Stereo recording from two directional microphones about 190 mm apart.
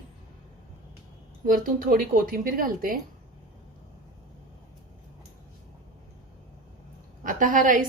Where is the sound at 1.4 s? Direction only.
45° right (ahead or behind).